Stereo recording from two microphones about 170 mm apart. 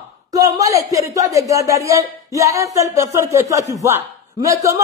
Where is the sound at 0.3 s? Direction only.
20° right (ahead or behind).